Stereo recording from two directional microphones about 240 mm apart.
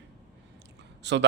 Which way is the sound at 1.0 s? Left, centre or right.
Right.